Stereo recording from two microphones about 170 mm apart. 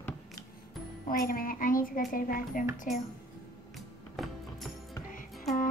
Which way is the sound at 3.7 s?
Centre (ahead or behind).